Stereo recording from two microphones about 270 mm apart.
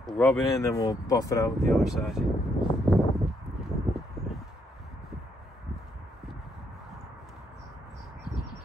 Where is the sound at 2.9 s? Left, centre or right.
Centre.